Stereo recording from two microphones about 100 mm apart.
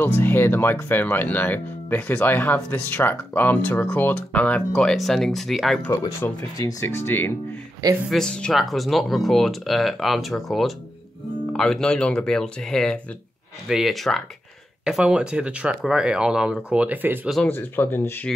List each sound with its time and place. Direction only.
0.0 s speech: 20° left (ahead or behind); by 5.8 s centre (ahead or behind)
5.8 s speech: 20° left (ahead or behind)
6.5 s speech: 30° left (ahead or behind)
8.1 s speech: 5° left (ahead or behind); by 17.3 s 20° right (ahead or behind)
17.4 s speech: 20° left (ahead or behind)